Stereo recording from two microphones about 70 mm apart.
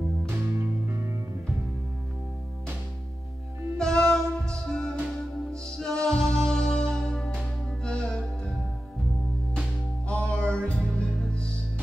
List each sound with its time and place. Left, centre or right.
0.3 s music: right
3.7 s music: centre
10.0 s music: centre